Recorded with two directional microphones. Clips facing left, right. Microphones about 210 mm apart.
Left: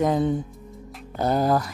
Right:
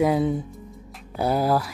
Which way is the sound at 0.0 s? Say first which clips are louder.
Right 1 dB; 5° right (ahead or behind).